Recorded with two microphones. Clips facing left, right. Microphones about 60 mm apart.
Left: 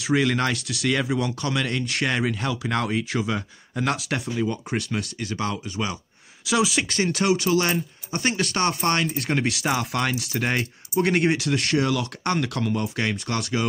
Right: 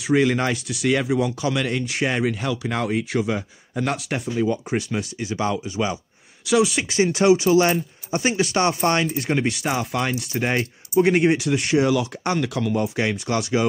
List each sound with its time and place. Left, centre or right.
0.1 s speech: centre
4.6 s speech: centre
6.4 s speech: centre
6.9 s speech: centre
9.0 s speech: centre